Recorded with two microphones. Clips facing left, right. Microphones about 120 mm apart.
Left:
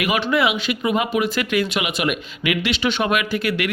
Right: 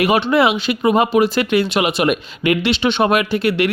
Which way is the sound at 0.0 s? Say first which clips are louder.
Right 5 dB; 30° right (ahead or behind).